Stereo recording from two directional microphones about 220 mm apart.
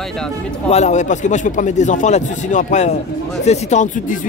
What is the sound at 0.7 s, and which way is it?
Speech, 30° left (ahead or behind).